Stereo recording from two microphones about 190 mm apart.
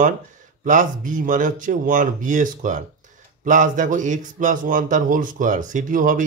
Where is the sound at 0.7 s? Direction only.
45° right (ahead or behind).